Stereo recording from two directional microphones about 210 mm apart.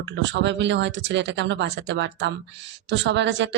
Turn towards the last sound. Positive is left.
turn(degrees=-60)  # may be behind; listen again after turning